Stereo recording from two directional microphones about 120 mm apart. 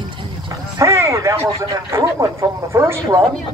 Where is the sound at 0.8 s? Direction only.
25° right (ahead or behind).